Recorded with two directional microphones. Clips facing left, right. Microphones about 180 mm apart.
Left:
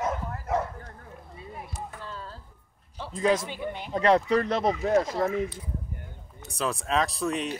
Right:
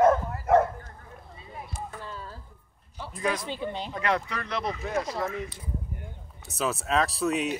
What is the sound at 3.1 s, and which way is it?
A man's voice, 25° left (ahead or behind).